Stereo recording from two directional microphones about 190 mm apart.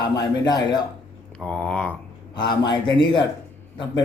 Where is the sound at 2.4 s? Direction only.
25° left (ahead or behind).